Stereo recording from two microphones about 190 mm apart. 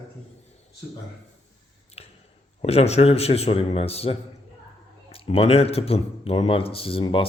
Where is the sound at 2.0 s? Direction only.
30° left (ahead or behind).